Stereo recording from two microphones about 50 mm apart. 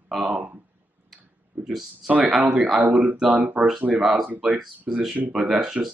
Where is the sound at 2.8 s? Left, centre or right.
Right.